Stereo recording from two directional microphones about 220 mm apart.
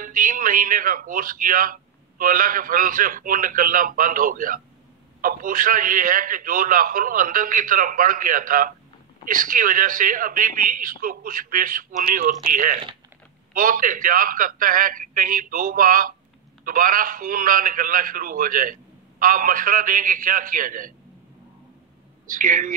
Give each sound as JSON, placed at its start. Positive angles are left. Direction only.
{"t": 0.0, "sound": "a man's voice", "side_deg": -40}
{"t": 22.3, "sound": "a man's voice", "side_deg": -40}